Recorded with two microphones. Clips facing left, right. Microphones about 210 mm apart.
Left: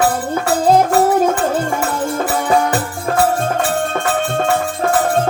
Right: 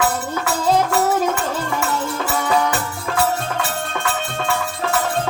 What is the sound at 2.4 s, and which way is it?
Music, 50° left (ahead or behind).